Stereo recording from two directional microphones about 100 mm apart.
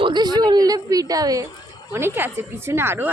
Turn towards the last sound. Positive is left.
turn(degrees=-25)  # may be behind; listen again after turning